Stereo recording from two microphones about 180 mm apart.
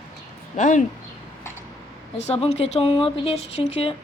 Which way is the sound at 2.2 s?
35° left (ahead or behind).